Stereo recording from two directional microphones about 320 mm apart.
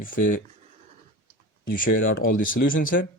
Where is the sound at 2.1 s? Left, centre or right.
Left.